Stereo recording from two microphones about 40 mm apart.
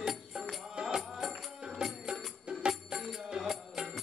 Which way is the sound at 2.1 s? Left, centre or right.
Right.